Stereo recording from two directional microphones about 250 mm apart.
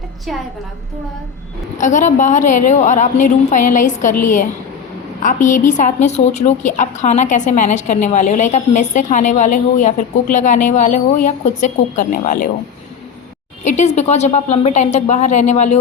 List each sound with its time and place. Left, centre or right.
1.8 s a woman's voice: left
5.2 s a woman's voice: left
13.7 s a woman's voice: left